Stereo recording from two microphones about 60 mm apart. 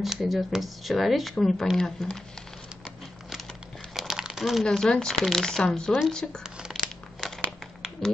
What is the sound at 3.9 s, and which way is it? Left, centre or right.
Crumpling, centre.